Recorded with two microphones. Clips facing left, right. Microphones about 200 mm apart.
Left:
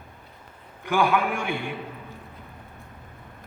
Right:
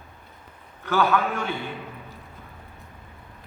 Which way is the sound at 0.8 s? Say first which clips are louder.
Even; 15° left (ahead or behind).